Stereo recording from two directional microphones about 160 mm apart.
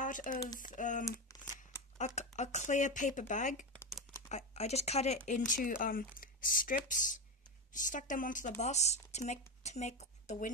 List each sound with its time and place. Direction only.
0.0 s speech: 55° left (ahead or behind)
1.3 s a sound: 20° left (ahead or behind)
2.0 s a woman's voice: 45° left (ahead or behind)